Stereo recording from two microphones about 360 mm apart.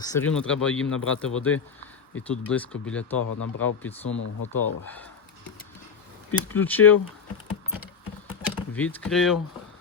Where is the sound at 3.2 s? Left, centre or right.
Left.